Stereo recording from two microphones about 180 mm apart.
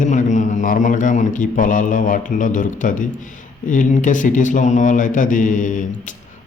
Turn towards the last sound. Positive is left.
turn(degrees=45)  # may be behind; listen again after turning